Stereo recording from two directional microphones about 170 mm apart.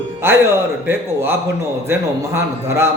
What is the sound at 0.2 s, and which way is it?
Speech, 15° right (ahead or behind).